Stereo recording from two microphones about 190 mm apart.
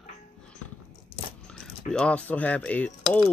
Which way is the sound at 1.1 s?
30° left (ahead or behind).